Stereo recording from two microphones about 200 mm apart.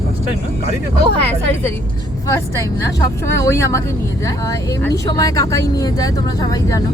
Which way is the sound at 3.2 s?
15° left (ahead or behind).